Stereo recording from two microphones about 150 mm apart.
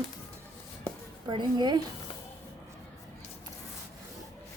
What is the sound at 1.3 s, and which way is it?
Speech, 30° right (ahead or behind).